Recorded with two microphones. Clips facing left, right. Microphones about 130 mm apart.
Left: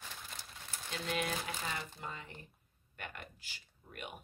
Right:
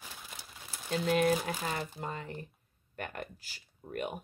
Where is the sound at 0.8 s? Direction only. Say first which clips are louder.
Right 10 dB; 40° right (ahead or behind).